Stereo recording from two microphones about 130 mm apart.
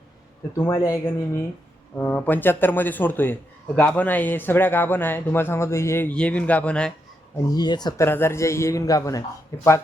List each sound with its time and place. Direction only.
0.5 s speech: 20° left (ahead or behind)
7.5 s speech: 30° left (ahead or behind)
7.9 s speech: 20° left (ahead or behind)